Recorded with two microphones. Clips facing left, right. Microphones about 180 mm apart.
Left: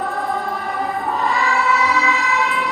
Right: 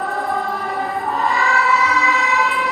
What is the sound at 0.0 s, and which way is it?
Choir, centre (ahead or behind).